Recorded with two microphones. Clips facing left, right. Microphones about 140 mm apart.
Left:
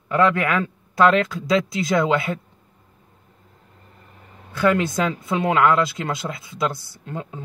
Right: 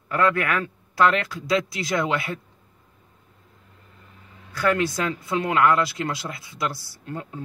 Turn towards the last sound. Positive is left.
turn(degrees=20)  # may be behind; listen again after turning